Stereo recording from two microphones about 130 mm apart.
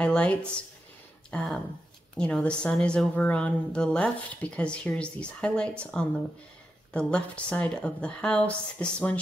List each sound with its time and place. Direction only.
0.0 s a woman's voice: 10° left (ahead or behind)